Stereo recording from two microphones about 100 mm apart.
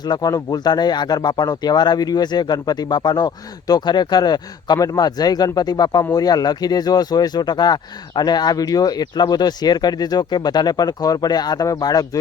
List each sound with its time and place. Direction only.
0.0 s speech: 40° left (ahead or behind)